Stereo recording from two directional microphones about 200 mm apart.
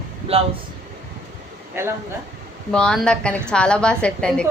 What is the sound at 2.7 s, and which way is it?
A woman's voice, 5° left (ahead or behind).